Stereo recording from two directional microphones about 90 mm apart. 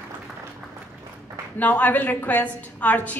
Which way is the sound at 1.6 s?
20° left (ahead or behind).